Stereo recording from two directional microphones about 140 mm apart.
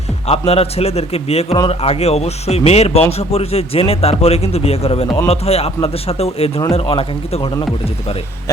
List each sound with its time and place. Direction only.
0.3 s a man's voice: 45° left (ahead or behind)